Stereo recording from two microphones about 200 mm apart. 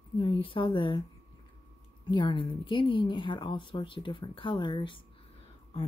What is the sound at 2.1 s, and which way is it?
Speech, 25° left (ahead or behind).